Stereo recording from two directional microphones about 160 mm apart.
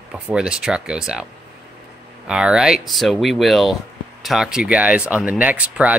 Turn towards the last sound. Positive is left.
turn(degrees=-10)  # may be behind; listen again after turning